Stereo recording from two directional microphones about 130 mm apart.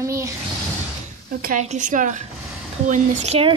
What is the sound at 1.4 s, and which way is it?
Speech, 75° right (ahead or behind).